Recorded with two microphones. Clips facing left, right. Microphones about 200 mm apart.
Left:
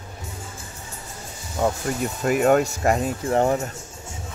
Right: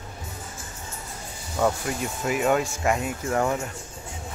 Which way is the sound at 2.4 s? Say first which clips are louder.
Left 5 dB; 40° left (ahead or behind).